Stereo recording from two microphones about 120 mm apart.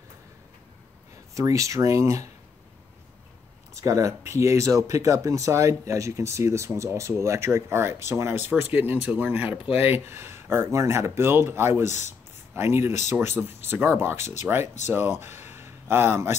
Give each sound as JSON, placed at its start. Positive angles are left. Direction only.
{"t": 1.3, "sound": "speech", "side_deg": -25}
{"t": 3.7, "sound": "speech", "side_deg": -30}
{"t": 11.8, "sound": "speech", "side_deg": 80}
{"t": 12.5, "sound": "speech", "side_deg": -20}